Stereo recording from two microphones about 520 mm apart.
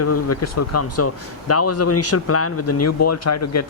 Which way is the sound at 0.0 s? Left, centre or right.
Left.